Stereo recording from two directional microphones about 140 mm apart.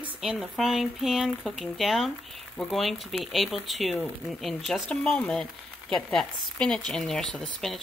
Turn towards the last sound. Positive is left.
turn(degrees=0)  # may be behind; listen again after turning